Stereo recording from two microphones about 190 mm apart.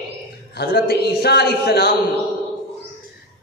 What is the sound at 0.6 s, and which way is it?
Speech, 55° left (ahead or behind).